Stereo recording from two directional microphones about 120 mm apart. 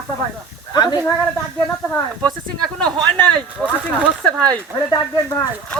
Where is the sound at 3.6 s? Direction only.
Centre (ahead or behind).